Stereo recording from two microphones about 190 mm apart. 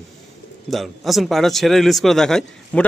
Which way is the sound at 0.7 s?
Centre (ahead or behind).